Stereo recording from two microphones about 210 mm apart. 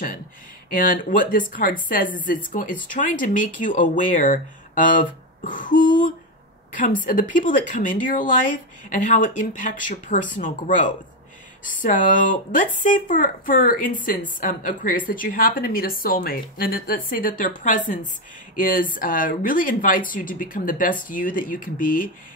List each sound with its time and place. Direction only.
0.7 s speech: 40° left (ahead or behind)